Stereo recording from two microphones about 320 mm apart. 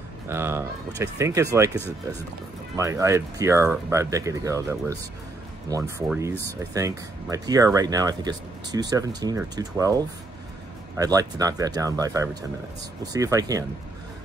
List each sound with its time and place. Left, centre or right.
0.3 s speech: centre